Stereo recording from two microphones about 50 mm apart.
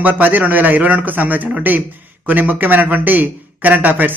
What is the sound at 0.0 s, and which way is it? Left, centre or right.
A man's voice, right.